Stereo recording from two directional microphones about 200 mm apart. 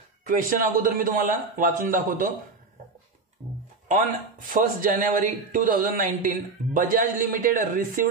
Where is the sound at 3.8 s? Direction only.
40° right (ahead or behind).